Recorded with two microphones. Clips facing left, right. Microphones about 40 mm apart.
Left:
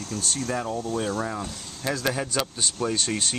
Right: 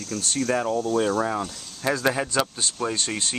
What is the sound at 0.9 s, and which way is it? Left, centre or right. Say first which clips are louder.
Speech: right 5 dB; right.